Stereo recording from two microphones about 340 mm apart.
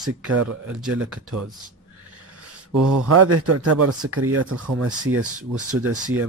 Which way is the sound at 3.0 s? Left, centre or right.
Right.